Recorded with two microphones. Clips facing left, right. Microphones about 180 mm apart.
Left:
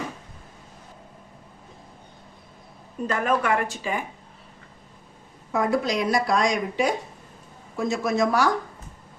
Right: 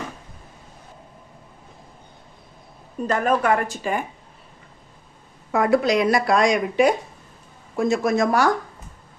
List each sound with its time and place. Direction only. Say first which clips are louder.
3.1 s speech: right 3 dB; 40° right (ahead or behind)
5.5 s speech: right 5 dB; 70° right (ahead or behind)
7.8 s speech: right 4 dB; 50° right (ahead or behind)